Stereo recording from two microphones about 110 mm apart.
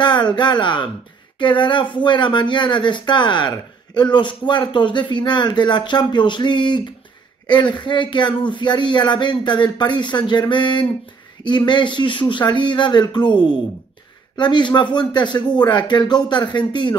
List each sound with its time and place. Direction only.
0.0 s speech: 45° left (ahead or behind)